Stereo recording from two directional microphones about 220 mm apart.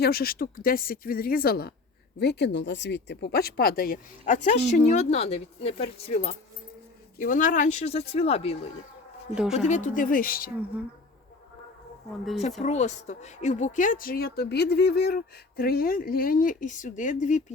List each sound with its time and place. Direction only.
0.0 s speech: 45° left (ahead or behind); by 6.1 s 25° left (ahead or behind)
7.2 s speech: 35° left (ahead or behind)
9.3 s speech: 5° right (ahead or behind)
9.6 s speech: 35° left (ahead or behind)
12.6 s speech: 30° left (ahead or behind)